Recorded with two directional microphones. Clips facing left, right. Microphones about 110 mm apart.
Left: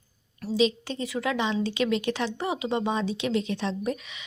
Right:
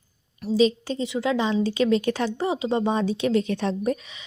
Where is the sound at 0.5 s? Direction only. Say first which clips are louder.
Right 4 dB; 35° right (ahead or behind).